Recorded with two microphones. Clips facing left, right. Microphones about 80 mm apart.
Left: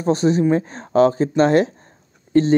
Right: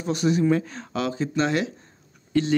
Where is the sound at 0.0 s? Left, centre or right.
Left.